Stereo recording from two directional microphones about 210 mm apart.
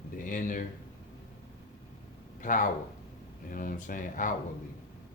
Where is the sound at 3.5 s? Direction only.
40° left (ahead or behind).